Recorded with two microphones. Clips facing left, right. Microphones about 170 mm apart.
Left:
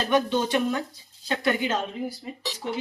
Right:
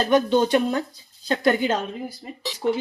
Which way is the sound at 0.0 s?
35° right (ahead or behind).